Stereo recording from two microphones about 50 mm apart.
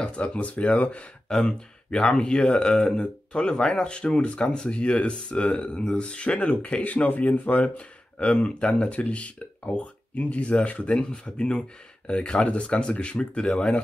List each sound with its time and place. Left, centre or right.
0.0 s speech: left
1.9 s speech: centre